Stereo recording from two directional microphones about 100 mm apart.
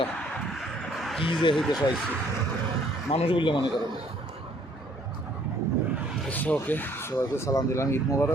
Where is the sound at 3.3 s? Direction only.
55° left (ahead or behind).